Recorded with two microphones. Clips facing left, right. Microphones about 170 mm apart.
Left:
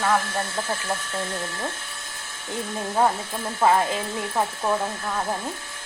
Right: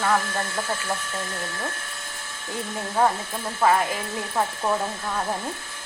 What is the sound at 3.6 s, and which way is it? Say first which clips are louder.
Speech: left 1 dB; 20° left (ahead or behind).